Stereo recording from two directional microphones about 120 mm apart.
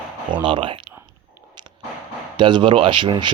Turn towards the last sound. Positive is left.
turn(degrees=-40)  # may be behind; listen again after turning